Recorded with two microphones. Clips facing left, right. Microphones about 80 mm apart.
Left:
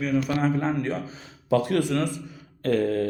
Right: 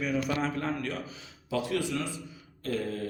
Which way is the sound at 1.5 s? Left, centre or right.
Left.